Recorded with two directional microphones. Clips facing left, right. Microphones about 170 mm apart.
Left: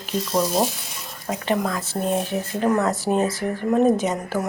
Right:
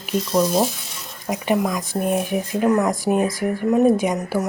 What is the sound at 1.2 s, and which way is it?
Speech, 15° right (ahead or behind).